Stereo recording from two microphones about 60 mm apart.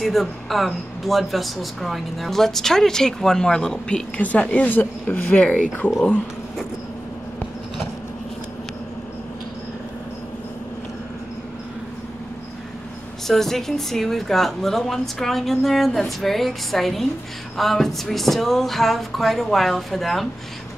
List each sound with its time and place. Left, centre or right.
0.0 s speech: centre
13.3 s speech: centre